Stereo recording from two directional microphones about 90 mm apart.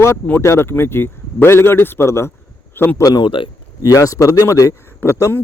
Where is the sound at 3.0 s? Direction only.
50° left (ahead or behind); by 5.3 s 30° left (ahead or behind).